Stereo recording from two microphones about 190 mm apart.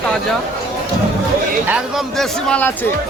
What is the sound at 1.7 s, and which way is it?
Speech, 5° right (ahead or behind).